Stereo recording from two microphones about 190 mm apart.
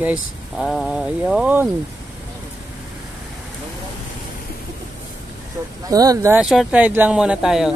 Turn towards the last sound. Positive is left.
turn(degrees=-5)  # may be behind; listen again after turning